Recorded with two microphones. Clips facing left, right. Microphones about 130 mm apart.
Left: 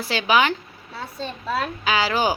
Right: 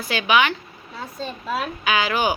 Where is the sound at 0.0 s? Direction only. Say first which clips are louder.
Even; 25° left (ahead or behind).